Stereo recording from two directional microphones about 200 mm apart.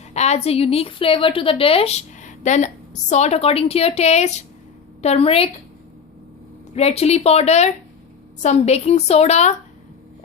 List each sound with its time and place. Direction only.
0.1 s a woman's voice: 35° left (ahead or behind)
6.7 s a woman's voice: 30° left (ahead or behind)